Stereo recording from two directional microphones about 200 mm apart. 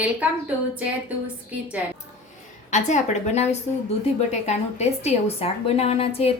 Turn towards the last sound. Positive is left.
turn(degrees=30)  # may be behind; listen again after turning